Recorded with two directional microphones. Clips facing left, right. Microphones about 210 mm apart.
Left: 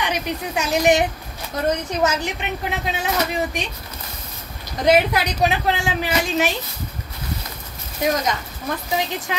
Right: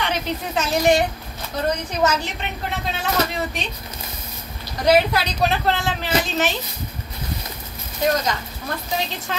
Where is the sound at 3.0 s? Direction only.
15° left (ahead or behind).